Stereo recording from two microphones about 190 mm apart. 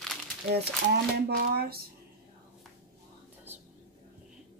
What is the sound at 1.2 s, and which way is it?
Speech, 55° right (ahead or behind).